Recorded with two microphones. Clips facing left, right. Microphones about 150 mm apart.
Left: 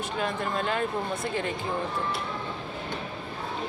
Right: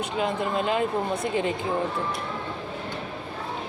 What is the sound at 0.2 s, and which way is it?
Speech, 20° right (ahead or behind).